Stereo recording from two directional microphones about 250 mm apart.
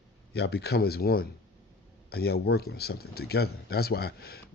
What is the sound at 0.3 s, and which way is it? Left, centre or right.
Speech, left.